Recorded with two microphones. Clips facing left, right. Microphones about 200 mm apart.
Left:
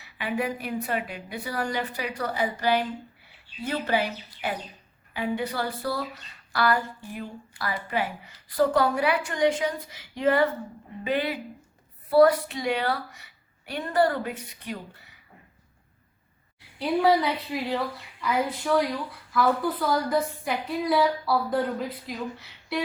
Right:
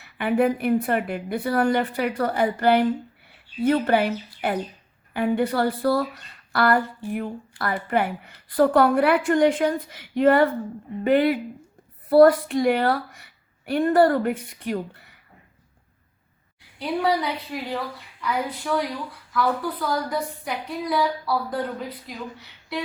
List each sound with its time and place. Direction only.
0.0 s a woman's voice: 55° right (ahead or behind)
16.7 s a woman's voice: centre (ahead or behind)